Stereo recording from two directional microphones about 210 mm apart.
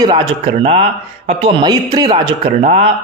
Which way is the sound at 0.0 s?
25° right (ahead or behind).